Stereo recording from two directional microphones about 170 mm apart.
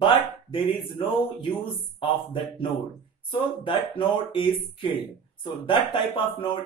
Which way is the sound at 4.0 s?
30° left (ahead or behind).